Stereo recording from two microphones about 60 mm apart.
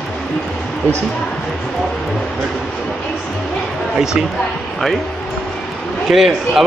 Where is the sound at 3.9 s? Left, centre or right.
Centre.